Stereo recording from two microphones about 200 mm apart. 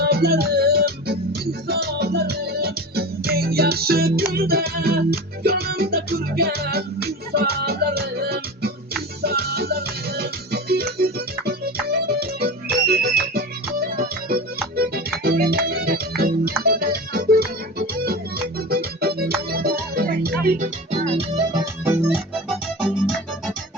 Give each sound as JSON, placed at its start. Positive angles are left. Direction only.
{"t": 0.0, "sound": "music", "side_deg": -50}
{"t": 20.9, "sound": "music", "side_deg": -30}
{"t": 21.5, "sound": "music", "side_deg": -15}
{"t": 22.4, "sound": "music", "side_deg": 0}